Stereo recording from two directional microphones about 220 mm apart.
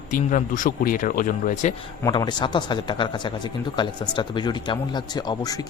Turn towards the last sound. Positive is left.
turn(degrees=15)  # may be behind; listen again after turning